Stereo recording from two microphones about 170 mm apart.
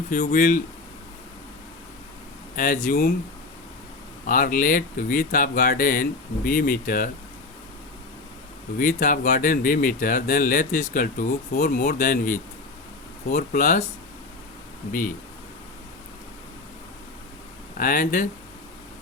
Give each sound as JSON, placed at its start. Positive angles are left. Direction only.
{"t": 0.1, "sound": "speech", "side_deg": 45}
{"t": 2.6, "sound": "speech", "side_deg": 45}
{"t": 4.3, "sound": "speech", "side_deg": 55}
{"t": 8.8, "sound": "speech", "side_deg": 50}
{"t": 17.7, "sound": "speech", "side_deg": 50}